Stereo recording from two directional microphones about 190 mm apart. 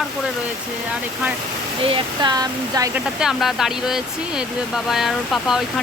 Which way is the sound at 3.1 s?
Centre (ahead or behind).